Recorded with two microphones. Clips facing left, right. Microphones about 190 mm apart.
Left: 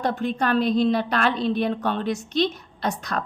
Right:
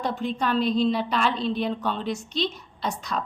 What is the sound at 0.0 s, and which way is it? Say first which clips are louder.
A woman's voice: left 3 dB; 60° left (ahead or behind).